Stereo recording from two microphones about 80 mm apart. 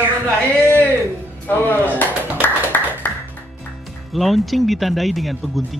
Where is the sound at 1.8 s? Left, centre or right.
Left.